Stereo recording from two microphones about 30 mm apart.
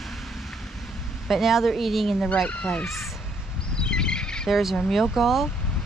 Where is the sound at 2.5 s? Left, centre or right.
Left.